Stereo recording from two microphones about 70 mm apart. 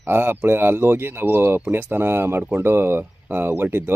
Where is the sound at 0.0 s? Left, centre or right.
Right.